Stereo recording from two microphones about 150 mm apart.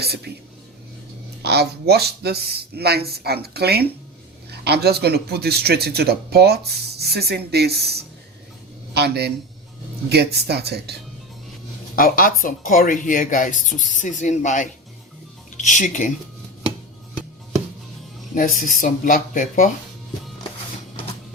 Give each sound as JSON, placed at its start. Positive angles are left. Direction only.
{"t": 0.0, "sound": "speech", "side_deg": -90}
{"t": 1.4, "sound": "a man's voice", "side_deg": -90}
{"t": 11.9, "sound": "speech", "side_deg": 70}
{"t": 18.3, "sound": "speech", "side_deg": 65}